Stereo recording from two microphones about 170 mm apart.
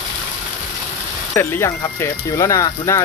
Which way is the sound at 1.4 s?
15° left (ahead or behind).